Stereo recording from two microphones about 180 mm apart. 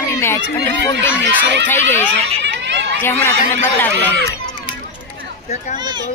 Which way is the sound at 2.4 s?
80° right.